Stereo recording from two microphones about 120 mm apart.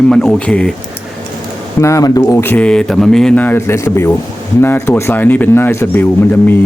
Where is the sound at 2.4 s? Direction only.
10° left (ahead or behind).